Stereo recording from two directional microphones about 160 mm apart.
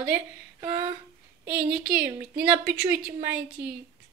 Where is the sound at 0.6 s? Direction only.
20° right (ahead or behind).